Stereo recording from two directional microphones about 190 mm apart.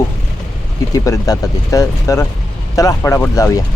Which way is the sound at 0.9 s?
20° left (ahead or behind).